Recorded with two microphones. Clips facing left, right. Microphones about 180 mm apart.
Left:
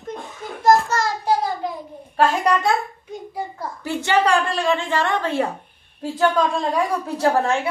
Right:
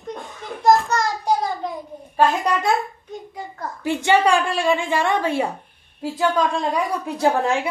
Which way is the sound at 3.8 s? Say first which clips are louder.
Right 2 dB; 15° right (ahead or behind).